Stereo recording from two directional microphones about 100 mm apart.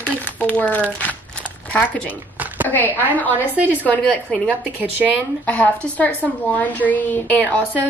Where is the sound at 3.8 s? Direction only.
15° left (ahead or behind).